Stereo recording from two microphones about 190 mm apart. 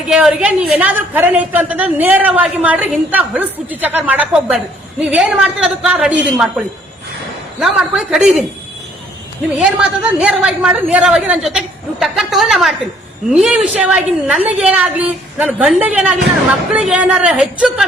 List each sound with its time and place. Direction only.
0.1 s a woman's voice: 5° right (ahead or behind)
9.6 s a woman's voice: 5° right (ahead or behind)